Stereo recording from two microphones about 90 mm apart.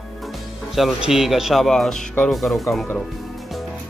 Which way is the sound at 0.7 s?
5° right (ahead or behind).